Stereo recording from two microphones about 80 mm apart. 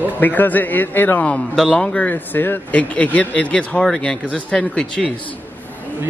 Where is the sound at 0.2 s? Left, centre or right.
Left.